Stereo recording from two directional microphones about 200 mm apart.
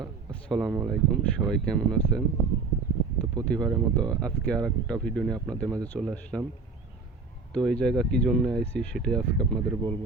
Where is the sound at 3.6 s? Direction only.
Centre (ahead or behind).